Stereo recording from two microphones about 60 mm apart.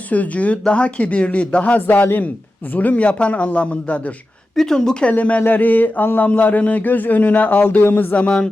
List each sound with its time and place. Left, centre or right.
0.1 s speech: left
4.5 s speech: centre